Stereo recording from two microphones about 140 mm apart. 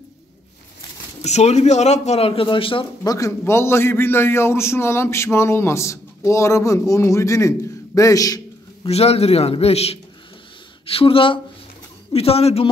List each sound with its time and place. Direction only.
1.2 s speech: 50° left (ahead or behind)
3.0 s a man's voice: 25° left (ahead or behind)
8.8 s speech: 45° left (ahead or behind)